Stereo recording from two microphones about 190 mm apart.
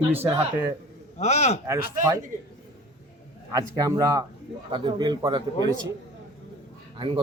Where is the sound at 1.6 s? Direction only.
15° right (ahead or behind).